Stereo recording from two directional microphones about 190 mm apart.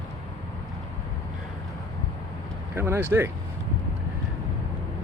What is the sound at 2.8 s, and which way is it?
Speech, 15° right (ahead or behind).